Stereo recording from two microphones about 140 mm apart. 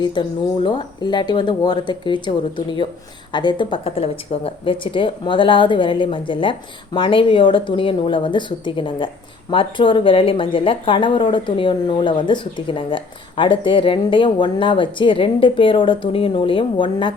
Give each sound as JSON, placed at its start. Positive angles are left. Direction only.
{"t": 0.0, "sound": "speech", "side_deg": 35}